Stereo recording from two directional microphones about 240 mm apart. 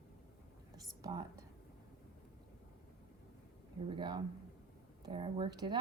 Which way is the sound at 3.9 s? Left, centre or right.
Centre.